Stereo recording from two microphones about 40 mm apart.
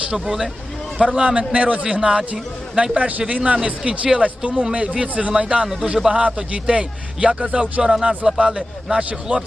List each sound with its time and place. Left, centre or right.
0.1 s a man's voice: centre
1.4 s a man's voice: right
2.7 s a man's voice: centre
3.0 s a man's voice: right
7.8 s a man's voice: centre
9.3 s speech: right